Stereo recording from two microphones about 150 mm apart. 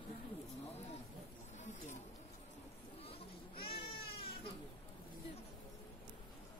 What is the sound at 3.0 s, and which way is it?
Baby cry, 40° left (ahead or behind).